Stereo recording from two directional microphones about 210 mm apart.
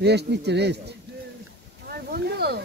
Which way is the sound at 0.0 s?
50° right (ahead or behind).